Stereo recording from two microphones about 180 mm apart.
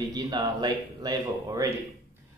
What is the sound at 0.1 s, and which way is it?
Speech, 20° right (ahead or behind).